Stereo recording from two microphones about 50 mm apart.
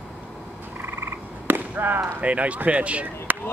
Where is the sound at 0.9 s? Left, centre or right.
Right.